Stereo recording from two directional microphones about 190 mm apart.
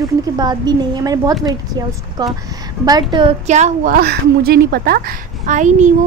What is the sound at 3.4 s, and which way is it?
A woman's voice, 40° right (ahead or behind).